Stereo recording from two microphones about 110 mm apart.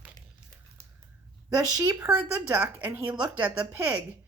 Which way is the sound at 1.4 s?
35° right (ahead or behind).